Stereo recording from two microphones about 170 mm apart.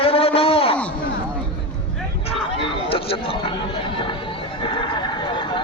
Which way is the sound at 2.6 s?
35° left (ahead or behind).